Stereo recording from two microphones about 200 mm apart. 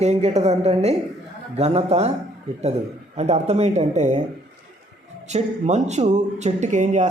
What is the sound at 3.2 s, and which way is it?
Speech, 35° right (ahead or behind).